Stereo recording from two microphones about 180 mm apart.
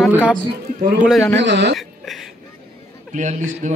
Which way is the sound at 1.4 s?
75° right (ahead or behind).